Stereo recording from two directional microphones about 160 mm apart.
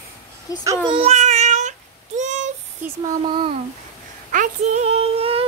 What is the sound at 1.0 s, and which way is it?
Child singing, 45° right (ahead or behind).